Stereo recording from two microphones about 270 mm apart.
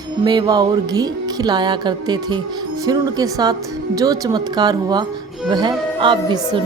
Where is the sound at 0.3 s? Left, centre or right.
Centre.